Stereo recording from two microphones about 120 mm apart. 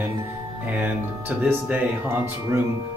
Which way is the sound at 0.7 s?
15° right (ahead or behind).